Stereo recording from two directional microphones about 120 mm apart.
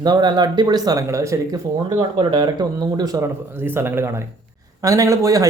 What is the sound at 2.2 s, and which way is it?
Speech, 40° right (ahead or behind).